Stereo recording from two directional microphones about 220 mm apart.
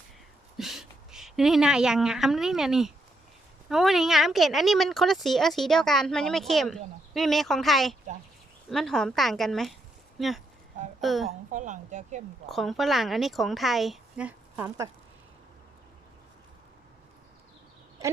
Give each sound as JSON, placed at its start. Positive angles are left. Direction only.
{"t": 0.5, "sound": "a woman's voice", "side_deg": 0}
{"t": 11.3, "sound": "speech", "side_deg": -35}
{"t": 12.5, "sound": "a woman's voice", "side_deg": 0}